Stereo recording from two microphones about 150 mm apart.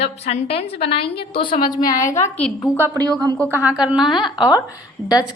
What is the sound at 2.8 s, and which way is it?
Speech, 25° right (ahead or behind).